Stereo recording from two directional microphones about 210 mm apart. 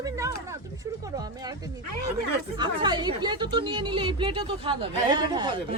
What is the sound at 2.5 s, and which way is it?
A woman's voice, 20° right (ahead or behind).